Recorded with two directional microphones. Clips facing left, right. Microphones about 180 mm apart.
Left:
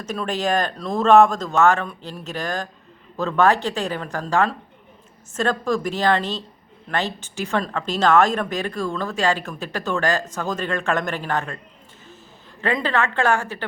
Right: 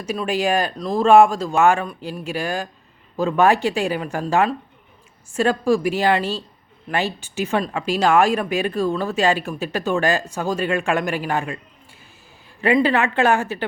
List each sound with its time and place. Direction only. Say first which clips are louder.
0.0 s speech: right 3 dB; 10° right (ahead or behind)
12.6 s speech: right 5 dB; 15° right (ahead or behind)